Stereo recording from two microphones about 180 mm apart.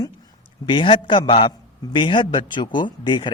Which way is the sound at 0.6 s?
25° left (ahead or behind).